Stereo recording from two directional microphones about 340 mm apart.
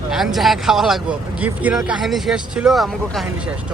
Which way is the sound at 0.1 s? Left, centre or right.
Centre.